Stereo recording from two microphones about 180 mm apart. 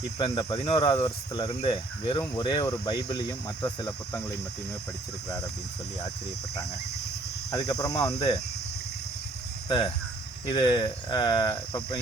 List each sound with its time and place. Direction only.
0.2 s speech: 25° left (ahead or behind)
7.7 s speech: 20° left (ahead or behind)
9.6 s speech: 25° left (ahead or behind)